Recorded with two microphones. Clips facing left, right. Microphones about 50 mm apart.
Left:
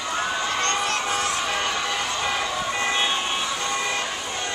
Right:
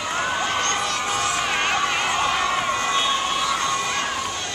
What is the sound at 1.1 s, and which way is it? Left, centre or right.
Crowd, right.